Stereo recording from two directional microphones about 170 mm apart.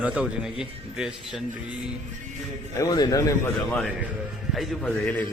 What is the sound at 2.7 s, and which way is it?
Speech, 20° left (ahead or behind).